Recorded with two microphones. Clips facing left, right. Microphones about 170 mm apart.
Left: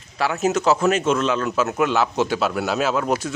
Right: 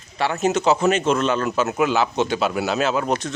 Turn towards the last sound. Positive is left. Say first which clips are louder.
# even
turn(degrees=5)  # may be behind; listen again after turning